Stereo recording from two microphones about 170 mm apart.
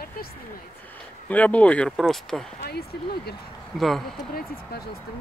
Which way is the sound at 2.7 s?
70° left (ahead or behind).